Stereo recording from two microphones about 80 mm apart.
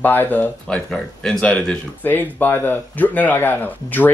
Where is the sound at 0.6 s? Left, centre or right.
Centre.